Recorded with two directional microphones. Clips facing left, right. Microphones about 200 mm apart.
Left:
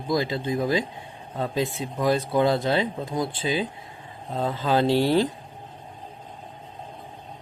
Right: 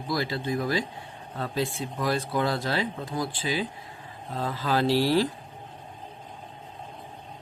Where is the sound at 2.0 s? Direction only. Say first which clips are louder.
Left 5 dB; 20° left (ahead or behind).